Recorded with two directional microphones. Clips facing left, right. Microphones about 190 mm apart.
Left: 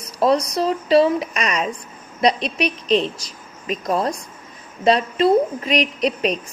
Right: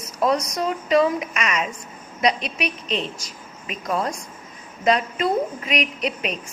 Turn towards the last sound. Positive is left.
turn(degrees=35)  # may be behind; listen again after turning